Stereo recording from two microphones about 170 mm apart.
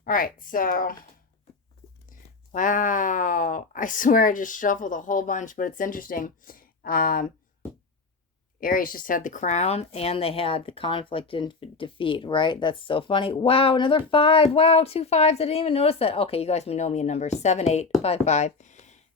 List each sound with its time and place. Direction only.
0.0 s speech: 55° left (ahead or behind)
2.0 s speech: 50° left (ahead or behind)
8.6 s speech: 55° left (ahead or behind)